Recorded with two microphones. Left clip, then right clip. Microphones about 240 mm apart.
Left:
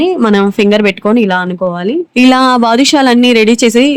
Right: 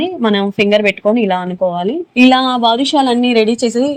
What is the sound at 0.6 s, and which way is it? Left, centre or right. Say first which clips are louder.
Speech: right 2 dB; left.